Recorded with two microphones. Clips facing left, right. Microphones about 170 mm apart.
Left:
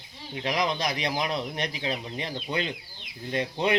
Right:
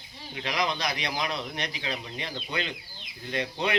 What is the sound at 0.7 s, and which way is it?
Speech, 20° left (ahead or behind).